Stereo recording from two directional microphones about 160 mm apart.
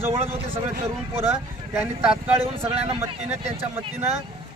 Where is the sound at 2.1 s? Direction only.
40° right (ahead or behind).